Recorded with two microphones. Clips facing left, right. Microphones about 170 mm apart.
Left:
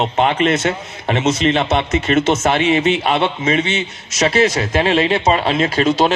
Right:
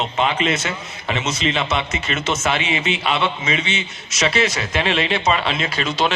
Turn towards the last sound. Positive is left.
turn(degrees=45)  # may be behind; listen again after turning